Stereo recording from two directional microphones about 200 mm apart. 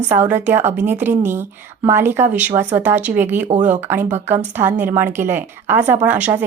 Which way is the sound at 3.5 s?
35° right (ahead or behind).